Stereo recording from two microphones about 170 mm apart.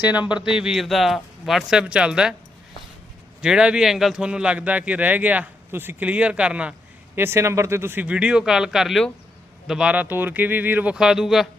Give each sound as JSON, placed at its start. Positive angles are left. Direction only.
{"t": 0.1, "sound": "a man's voice", "side_deg": -5}
{"t": 3.4, "sound": "speech", "side_deg": -5}